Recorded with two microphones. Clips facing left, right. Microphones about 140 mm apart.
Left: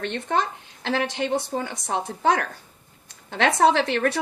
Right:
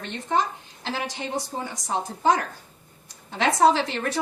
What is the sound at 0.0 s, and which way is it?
A woman's voice, 65° left (ahead or behind).